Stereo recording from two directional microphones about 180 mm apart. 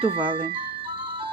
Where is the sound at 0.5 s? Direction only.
30° right (ahead or behind).